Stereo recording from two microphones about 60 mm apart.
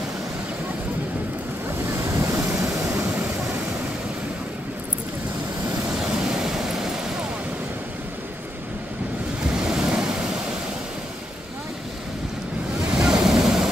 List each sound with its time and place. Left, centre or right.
1.9 s waves: right
2.6 s vehicle: right
5.7 s vehicle: centre
9.5 s waves: centre
12.8 s waves: centre